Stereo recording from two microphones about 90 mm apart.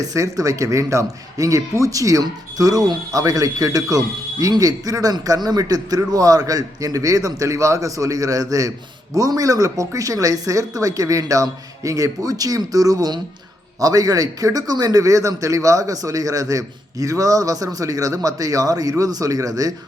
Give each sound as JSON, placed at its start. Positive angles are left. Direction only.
{"t": 0.0, "sound": "speech", "side_deg": -40}